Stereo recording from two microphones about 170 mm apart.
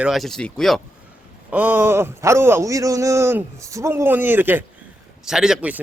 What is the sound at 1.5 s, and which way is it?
Speech, 10° right (ahead or behind).